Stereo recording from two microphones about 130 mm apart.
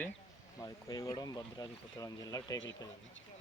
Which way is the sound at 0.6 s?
25° left (ahead or behind).